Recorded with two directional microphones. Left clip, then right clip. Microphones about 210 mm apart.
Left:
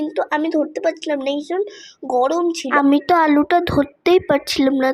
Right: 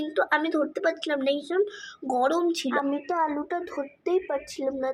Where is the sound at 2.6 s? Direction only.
40° left (ahead or behind).